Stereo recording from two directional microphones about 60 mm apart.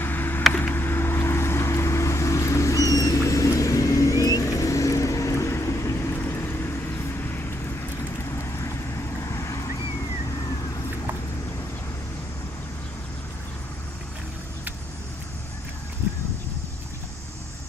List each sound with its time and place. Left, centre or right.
0.0 s a sound: left
0.7 s vehicle: left
3.2 s vehicle: left
9.2 s vehicle: left